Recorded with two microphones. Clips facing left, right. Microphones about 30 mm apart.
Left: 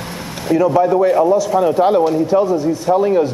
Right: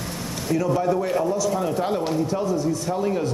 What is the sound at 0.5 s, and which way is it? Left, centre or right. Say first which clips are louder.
A man's voice: left 9 dB; left.